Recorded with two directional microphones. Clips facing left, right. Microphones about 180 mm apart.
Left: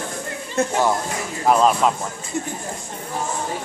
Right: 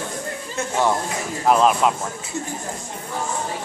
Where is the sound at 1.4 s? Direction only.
Centre (ahead or behind).